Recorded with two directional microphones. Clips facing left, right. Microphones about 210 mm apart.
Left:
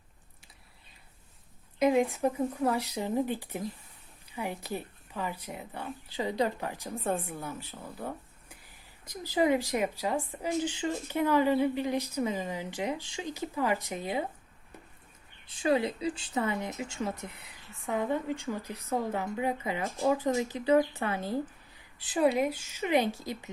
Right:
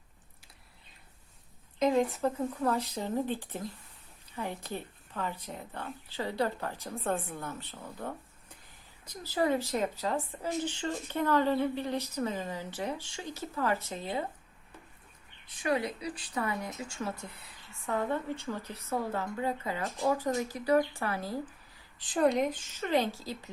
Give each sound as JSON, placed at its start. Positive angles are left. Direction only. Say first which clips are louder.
{"t": 1.8, "sound": "speech", "louder": "left 2 dB", "side_deg": 10}
{"t": 15.4, "sound": "speech", "louder": "left 4 dB", "side_deg": 25}
{"t": 21.9, "sound": "speech", "louder": "left 1 dB", "side_deg": 5}